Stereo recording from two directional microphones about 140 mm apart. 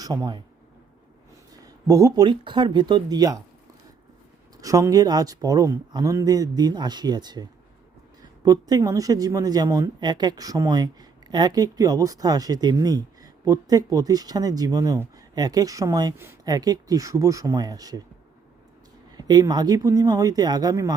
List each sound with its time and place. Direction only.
0.0 s speech: 25° right (ahead or behind)
1.6 s speech: 25° right (ahead or behind)
4.5 s speech: 25° right (ahead or behind)
16.5 s speech: 25° right (ahead or behind)
19.1 s speech: 30° right (ahead or behind)